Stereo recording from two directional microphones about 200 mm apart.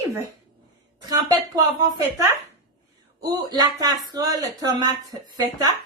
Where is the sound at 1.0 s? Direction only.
20° right (ahead or behind).